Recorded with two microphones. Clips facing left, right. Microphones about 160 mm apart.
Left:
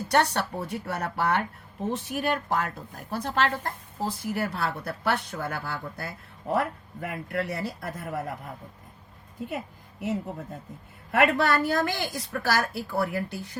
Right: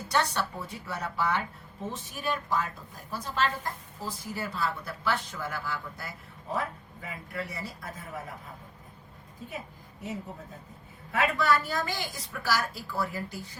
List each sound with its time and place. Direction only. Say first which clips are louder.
0.1 s a woman's voice: left 4 dB; 65° left (ahead or behind)
10.0 s a woman's voice: left 7 dB; 70° left (ahead or behind)